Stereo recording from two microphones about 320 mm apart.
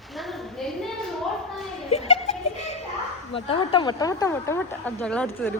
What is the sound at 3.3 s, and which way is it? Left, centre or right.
Speech, centre.